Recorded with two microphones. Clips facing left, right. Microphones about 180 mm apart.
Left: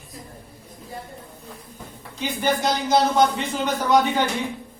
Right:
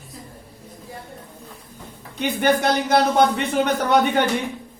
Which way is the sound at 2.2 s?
60° right (ahead or behind).